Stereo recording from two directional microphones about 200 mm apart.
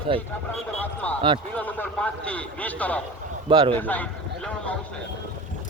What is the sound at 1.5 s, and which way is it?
A man's voice, 10° left (ahead or behind).